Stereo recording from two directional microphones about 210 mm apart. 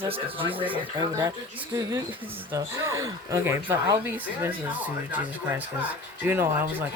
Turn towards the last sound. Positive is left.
turn(degrees=-10)  # may be behind; listen again after turning